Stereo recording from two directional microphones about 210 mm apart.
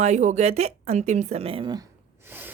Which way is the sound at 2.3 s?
10° right (ahead or behind).